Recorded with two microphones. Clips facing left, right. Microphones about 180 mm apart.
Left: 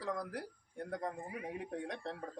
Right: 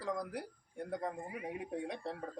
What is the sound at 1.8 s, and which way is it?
Speech, 10° right (ahead or behind).